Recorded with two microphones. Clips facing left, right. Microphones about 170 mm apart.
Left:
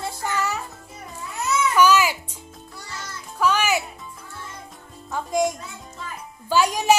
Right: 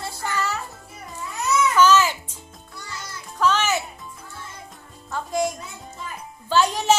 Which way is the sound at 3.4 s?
10° left (ahead or behind).